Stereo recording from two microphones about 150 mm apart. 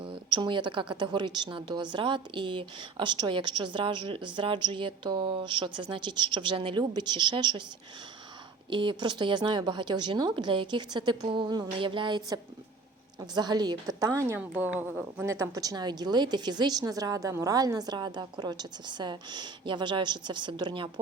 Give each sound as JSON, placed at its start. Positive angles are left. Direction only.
{"t": 0.0, "sound": "a woman's voice", "side_deg": -35}
{"t": 8.7, "sound": "a woman's voice", "side_deg": -35}